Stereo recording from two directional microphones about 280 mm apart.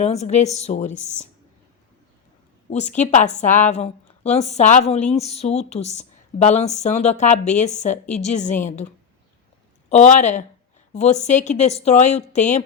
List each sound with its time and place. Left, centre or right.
0.0 s a woman's voice: left
3.0 s a woman's voice: left
9.9 s a woman's voice: left